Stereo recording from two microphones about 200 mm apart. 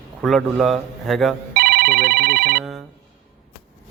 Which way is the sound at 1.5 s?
50° right (ahead or behind).